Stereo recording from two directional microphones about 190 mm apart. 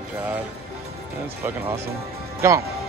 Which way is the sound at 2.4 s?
15° right (ahead or behind).